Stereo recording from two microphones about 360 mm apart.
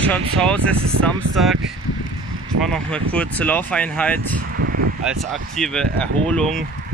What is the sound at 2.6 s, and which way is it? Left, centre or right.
Speech, centre.